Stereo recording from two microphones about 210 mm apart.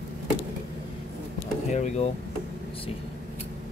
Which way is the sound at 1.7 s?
35° left (ahead or behind).